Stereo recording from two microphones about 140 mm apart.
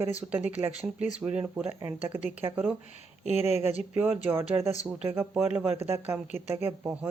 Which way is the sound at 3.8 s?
10° right (ahead or behind).